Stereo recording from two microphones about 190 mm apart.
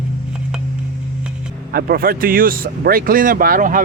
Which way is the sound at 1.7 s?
50° right (ahead or behind).